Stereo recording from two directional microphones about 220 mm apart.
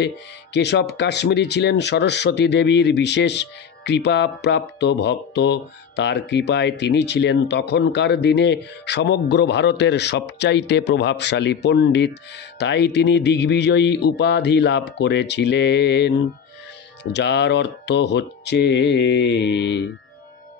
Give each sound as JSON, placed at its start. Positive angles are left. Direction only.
{"t": 0.0, "sound": "speech", "side_deg": 50}